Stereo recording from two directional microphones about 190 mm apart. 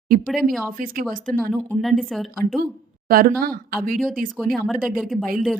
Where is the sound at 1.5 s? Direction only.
Centre (ahead or behind).